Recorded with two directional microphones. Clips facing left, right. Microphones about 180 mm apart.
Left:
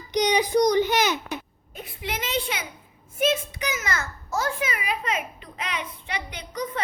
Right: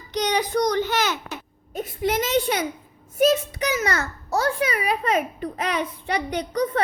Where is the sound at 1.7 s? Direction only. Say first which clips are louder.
Right 10 dB; 40° right (ahead or behind).